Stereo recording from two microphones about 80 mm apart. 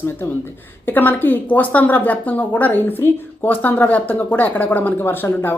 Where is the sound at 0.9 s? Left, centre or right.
Left.